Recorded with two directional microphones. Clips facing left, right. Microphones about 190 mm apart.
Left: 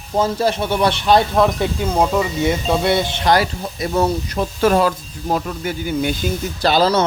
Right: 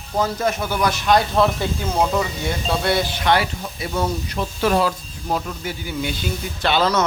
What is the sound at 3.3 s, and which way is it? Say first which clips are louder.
Speech: left 4 dB; 40° left (ahead or behind).